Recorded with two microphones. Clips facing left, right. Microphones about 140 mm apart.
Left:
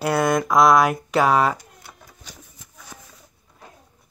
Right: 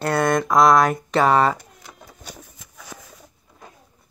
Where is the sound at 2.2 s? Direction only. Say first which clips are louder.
Right 6 dB; 90° right.